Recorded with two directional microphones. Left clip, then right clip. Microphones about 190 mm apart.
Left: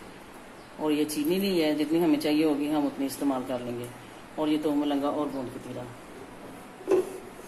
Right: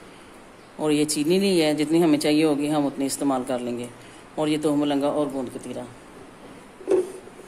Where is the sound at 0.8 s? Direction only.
50° right (ahead or behind).